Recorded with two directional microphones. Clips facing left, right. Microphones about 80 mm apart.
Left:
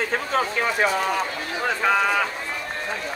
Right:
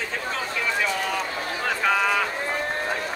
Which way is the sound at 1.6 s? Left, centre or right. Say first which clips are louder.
Left 2 dB; centre.